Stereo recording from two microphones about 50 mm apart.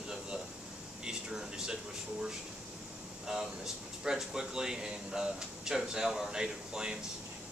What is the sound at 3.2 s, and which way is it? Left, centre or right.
Speech, centre.